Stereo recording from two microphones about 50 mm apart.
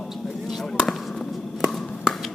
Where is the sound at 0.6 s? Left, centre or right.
Centre.